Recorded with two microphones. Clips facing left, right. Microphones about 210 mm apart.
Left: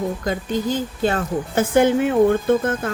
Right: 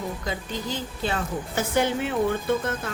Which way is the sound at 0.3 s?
50° left (ahead or behind).